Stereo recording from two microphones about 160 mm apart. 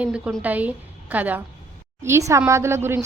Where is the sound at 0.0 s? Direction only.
5° right (ahead or behind).